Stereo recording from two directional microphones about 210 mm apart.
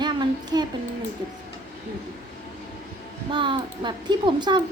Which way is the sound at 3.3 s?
25° right (ahead or behind).